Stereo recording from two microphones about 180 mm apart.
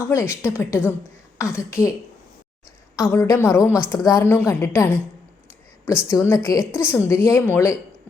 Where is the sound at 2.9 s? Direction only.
15° left (ahead or behind).